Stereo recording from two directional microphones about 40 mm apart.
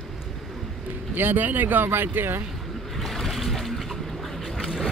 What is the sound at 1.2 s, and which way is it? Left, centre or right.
Speech, right.